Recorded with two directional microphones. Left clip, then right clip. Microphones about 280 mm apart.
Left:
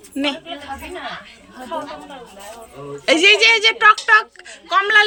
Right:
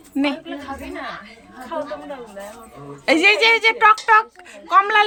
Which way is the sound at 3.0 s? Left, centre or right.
Centre.